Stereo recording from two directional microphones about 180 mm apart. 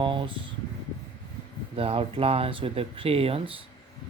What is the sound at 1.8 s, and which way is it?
Speech, 30° right (ahead or behind).